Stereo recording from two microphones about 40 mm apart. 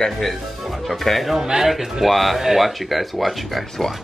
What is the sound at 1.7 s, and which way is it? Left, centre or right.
Speech, centre.